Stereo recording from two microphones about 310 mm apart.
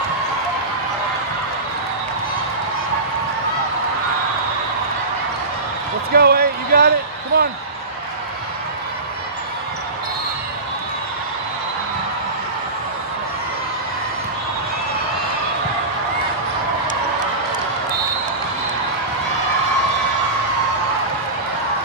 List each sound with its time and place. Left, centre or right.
6.1 s speech: right